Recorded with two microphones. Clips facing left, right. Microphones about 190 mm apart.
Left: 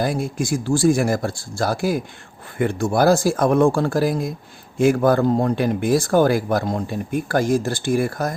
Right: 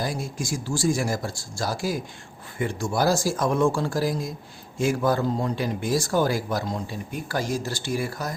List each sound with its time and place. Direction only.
0.0 s speech: 60° left (ahead or behind)